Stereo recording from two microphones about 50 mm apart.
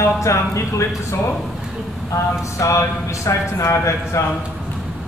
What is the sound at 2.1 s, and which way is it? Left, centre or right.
A man's voice, left.